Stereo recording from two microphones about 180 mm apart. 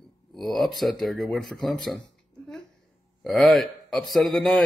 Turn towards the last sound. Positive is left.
turn(degrees=0)  # may be behind; listen again after turning